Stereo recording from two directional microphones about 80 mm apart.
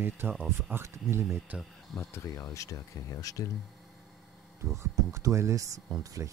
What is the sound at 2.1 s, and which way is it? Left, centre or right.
Speech, left.